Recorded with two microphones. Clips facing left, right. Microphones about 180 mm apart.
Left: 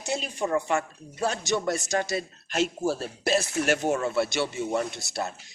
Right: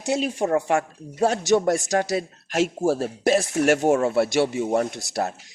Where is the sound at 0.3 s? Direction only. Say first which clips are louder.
Right 1 dB; 45° right (ahead or behind).